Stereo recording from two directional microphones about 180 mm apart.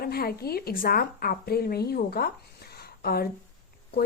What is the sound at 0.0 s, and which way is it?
A woman's voice, 60° left (ahead or behind).